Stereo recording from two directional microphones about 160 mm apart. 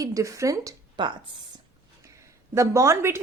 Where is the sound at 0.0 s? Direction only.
20° right (ahead or behind).